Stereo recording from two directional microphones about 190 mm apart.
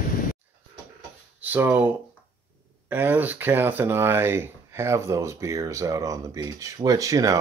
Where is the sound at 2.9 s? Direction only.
10° right (ahead or behind).